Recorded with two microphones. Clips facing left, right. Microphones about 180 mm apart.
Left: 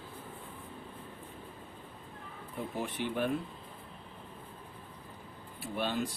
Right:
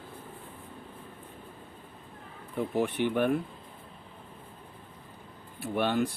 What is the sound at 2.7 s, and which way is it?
Speech, 65° right (ahead or behind).